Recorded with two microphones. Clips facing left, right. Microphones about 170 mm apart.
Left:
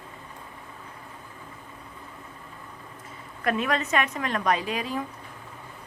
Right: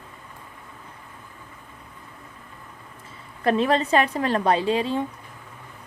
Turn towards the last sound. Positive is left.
turn(degrees=-30)  # may be behind; listen again after turning